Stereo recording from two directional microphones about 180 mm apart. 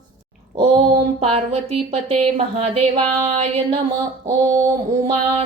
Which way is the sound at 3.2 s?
35° right (ahead or behind).